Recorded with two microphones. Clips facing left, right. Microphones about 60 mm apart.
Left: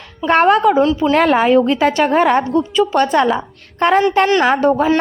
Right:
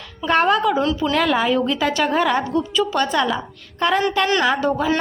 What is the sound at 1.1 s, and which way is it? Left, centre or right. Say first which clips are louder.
A woman's voice: left 7 dB; left.